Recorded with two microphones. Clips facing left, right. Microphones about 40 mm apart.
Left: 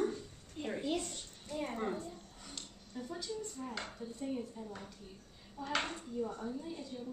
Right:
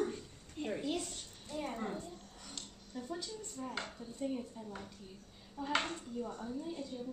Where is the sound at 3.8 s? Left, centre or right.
Centre.